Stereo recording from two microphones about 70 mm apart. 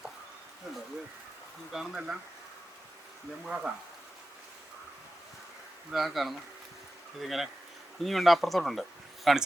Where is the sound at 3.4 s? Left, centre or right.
Centre.